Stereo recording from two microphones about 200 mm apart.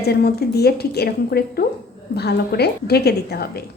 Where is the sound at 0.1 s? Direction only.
50° left (ahead or behind).